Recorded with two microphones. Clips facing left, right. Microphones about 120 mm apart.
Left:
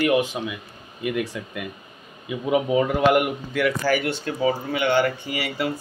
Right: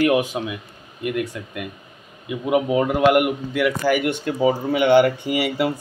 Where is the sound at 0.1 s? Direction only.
15° right (ahead or behind).